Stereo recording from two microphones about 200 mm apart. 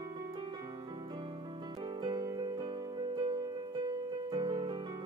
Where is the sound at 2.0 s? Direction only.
20° right (ahead or behind).